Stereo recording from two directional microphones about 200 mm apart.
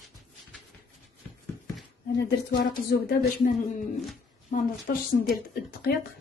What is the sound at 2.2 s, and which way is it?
Speech, 55° left (ahead or behind).